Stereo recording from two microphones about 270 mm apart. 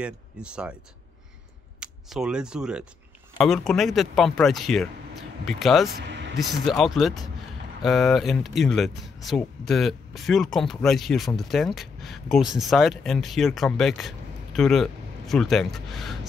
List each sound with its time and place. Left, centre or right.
0.0 s speech: centre
1.8 s speech: centre
6.0 s vehicle: right
6.3 s speech: centre